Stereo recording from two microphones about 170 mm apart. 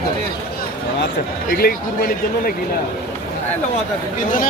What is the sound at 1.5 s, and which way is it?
Speech, 60° left (ahead or behind).